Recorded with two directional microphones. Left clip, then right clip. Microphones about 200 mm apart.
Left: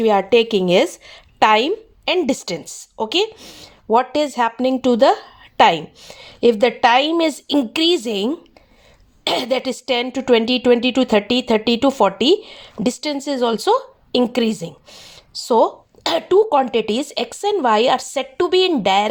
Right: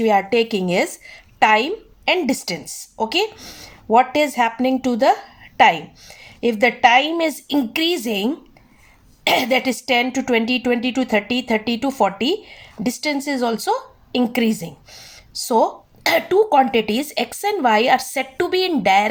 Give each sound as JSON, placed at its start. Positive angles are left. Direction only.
{"t": 0.0, "sound": "a woman's voice", "side_deg": 35}